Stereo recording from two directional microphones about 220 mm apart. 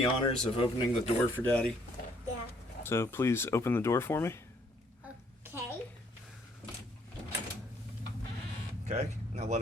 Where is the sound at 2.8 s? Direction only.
10° left (ahead or behind).